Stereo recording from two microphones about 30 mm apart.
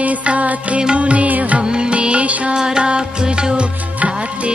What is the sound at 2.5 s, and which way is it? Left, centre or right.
Music, right.